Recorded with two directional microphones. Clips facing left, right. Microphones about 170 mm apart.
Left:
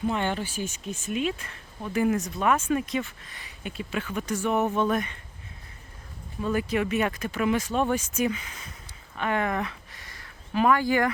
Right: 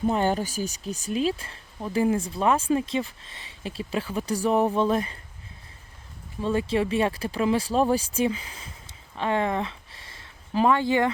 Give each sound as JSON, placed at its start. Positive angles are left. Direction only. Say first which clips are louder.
{"t": 0.0, "sound": "speech", "louder": "right 4 dB", "side_deg": -40}
{"t": 6.4, "sound": "speech", "louder": "right 2 dB", "side_deg": -25}
{"t": 9.1, "sound": "a sound", "louder": "right 2 dB", "side_deg": -30}